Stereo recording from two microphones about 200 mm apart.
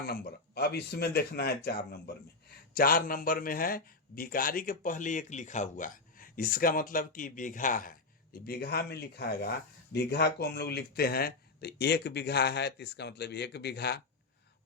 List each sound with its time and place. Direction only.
0.0 s speech: 50° left (ahead or behind)